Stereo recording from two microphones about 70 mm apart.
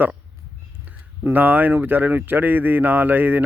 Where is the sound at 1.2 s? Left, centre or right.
Right.